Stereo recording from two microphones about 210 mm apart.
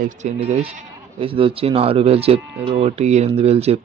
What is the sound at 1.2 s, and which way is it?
Speech, 25° right (ahead or behind).